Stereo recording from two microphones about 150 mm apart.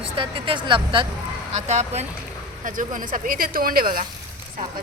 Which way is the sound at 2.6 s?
60° right (ahead or behind).